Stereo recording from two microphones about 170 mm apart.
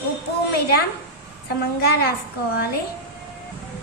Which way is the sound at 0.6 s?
70° left (ahead or behind).